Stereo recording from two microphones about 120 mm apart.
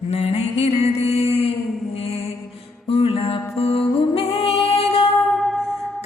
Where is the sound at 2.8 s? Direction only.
55° left (ahead or behind).